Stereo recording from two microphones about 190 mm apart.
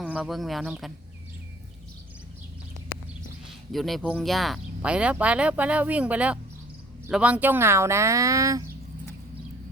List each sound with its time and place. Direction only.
0.0 s speech: 5° right (ahead or behind)
3.7 s speech: centre (ahead or behind); by 8.6 s 15° right (ahead or behind)